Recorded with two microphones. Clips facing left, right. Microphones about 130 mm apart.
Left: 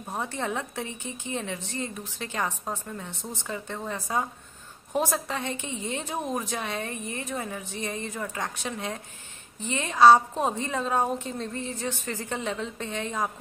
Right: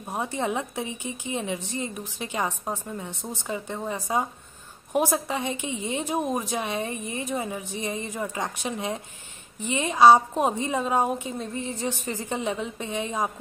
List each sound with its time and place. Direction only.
0.0 s a woman's voice: 15° right (ahead or behind)